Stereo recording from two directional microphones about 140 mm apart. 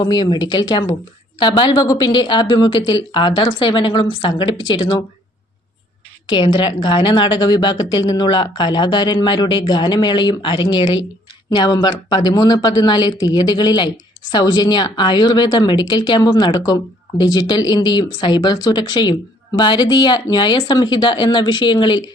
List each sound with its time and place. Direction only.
0.0 s speech: 30° left (ahead or behind)
6.2 s speech: 35° left (ahead or behind)